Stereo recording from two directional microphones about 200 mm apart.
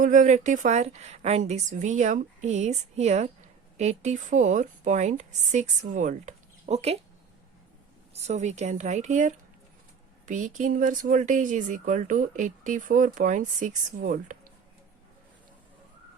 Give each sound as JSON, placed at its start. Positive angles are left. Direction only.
{"t": 0.0, "sound": "speech", "side_deg": -40}
{"t": 8.1, "sound": "speech", "side_deg": -35}